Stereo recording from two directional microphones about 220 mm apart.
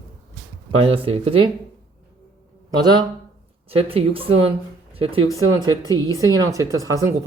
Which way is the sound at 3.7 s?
25° right (ahead or behind).